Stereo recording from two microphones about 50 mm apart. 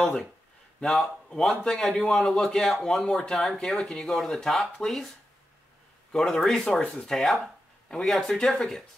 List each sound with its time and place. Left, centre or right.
0.0 s speech: centre
4.1 s speech: centre
6.1 s speech: centre
6.8 s speech: left
7.1 s speech: centre